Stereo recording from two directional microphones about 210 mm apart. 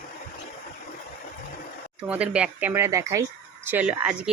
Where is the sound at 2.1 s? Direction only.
5° right (ahead or behind).